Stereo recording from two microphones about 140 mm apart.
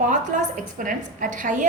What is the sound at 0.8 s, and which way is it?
Speech, 70° right (ahead or behind).